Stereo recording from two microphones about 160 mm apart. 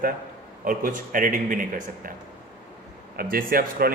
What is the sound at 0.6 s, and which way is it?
A man's voice, 60° right (ahead or behind).